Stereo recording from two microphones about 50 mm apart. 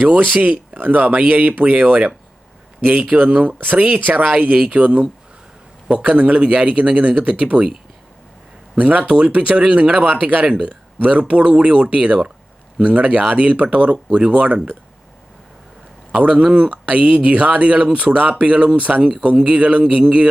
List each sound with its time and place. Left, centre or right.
0.0 s speech: right
0.3 s speech: right
0.8 s speech: right
8.7 s speech: right
16.1 s speech: centre
20.0 s a sound: centre